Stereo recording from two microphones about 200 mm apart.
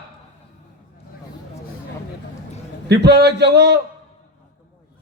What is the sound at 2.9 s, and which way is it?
Speech, 60° right (ahead or behind).